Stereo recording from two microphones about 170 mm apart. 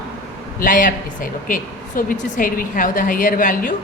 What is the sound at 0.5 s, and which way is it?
A woman's voice, 50° left (ahead or behind).